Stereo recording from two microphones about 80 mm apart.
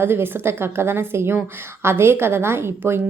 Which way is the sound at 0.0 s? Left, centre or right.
Right.